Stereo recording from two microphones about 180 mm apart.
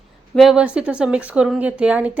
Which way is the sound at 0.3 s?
5° right (ahead or behind).